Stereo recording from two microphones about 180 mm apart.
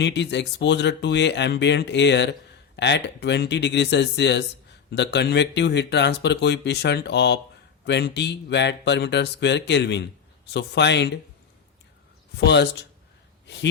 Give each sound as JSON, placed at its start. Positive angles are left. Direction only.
{"t": 0.0, "sound": "speech", "side_deg": 75}
{"t": 12.4, "sound": "speech", "side_deg": 70}